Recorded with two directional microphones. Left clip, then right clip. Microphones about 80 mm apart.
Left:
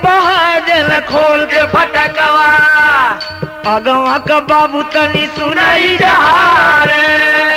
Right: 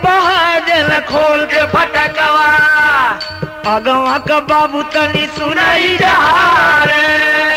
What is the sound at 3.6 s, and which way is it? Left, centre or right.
Music, left.